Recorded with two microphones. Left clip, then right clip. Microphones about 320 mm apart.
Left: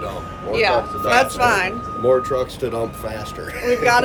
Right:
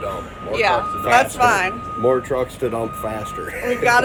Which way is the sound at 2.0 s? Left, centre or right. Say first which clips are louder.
Left 1 dB; centre.